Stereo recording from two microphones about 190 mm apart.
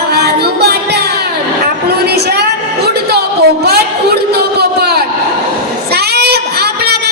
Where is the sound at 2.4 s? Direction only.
60° right (ahead or behind).